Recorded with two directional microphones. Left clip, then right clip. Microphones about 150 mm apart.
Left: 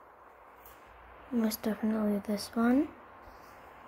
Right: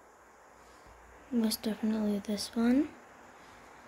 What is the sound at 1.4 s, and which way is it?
Speech, 5° right (ahead or behind).